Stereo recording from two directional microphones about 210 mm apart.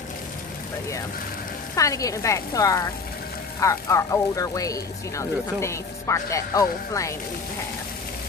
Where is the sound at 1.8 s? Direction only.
15° left (ahead or behind).